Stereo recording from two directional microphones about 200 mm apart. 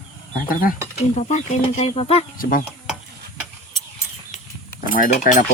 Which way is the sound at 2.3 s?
45° left (ahead or behind).